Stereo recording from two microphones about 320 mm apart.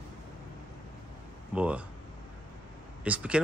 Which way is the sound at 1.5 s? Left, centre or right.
Centre.